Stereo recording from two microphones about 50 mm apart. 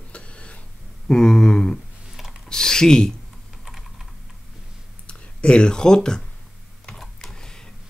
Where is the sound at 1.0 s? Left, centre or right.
Centre.